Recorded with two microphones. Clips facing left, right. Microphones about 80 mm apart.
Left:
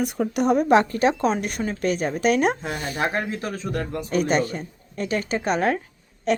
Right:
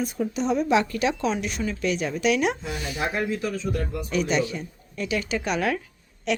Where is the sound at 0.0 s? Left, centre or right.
Left.